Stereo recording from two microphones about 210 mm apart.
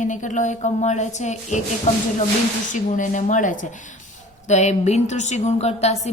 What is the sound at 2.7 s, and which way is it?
A woman's voice, 35° left (ahead or behind).